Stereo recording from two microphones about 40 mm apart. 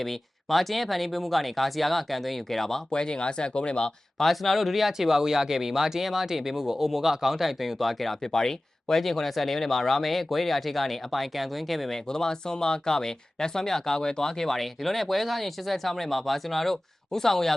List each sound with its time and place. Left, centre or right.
0.0 s speech: centre
2.9 s speech: left
4.2 s speech: centre
8.2 s speech: centre
12.0 s speech: centre